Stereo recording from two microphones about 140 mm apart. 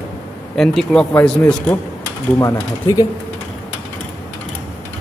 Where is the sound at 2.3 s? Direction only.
20° left (ahead or behind).